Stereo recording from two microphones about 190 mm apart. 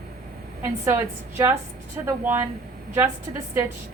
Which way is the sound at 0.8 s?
15° right (ahead or behind).